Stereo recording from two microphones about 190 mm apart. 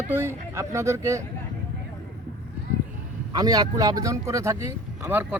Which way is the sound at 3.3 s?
20° right (ahead or behind).